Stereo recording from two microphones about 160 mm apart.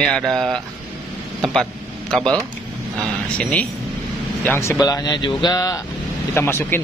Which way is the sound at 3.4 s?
5° left (ahead or behind).